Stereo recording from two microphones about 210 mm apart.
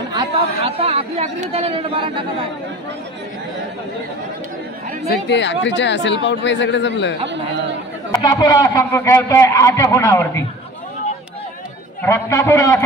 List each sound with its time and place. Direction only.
0.1 s a man's voice: 25° right (ahead or behind)
5.3 s speech: 55° left (ahead or behind)
8.1 s a man's voice: 20° left (ahead or behind)
12.0 s a man's voice: 15° left (ahead or behind)